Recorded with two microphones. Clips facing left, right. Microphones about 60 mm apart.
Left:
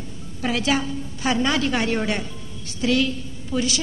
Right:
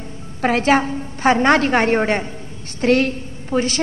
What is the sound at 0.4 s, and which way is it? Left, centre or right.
A woman's voice, right.